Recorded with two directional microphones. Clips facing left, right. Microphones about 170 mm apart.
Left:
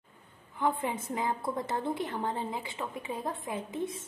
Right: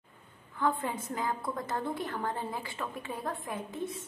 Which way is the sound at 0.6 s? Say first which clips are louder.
Left 1 dB; 20° left (ahead or behind).